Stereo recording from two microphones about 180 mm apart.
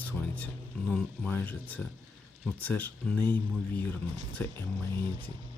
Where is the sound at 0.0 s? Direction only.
10° left (ahead or behind).